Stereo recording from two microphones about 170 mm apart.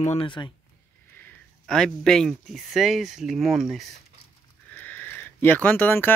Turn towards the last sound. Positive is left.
turn(degrees=10)  # may be behind; listen again after turning